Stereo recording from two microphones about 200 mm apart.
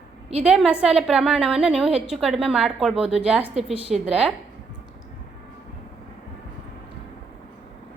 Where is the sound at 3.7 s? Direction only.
30° right (ahead or behind).